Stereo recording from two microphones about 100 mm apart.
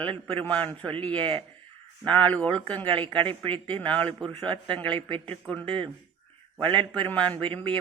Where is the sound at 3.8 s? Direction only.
15° left (ahead or behind).